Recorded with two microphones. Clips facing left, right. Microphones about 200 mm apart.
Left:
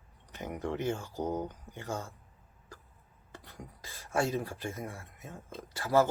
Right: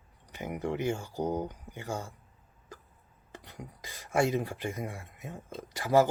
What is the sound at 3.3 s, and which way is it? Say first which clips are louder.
Speech: right 3 dB; 15° right (ahead or behind).